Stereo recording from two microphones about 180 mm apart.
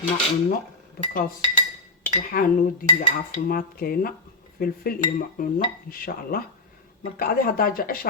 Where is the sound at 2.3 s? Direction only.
55° left (ahead or behind).